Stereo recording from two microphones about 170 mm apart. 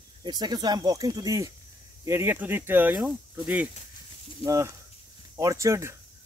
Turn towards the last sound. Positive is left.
turn(degrees=-20)  # may be behind; listen again after turning